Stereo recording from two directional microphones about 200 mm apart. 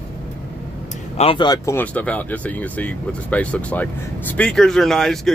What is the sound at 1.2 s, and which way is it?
Speech, 25° left (ahead or behind).